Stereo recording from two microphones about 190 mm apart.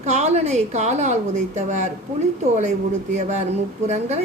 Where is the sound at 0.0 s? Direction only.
35° right (ahead or behind).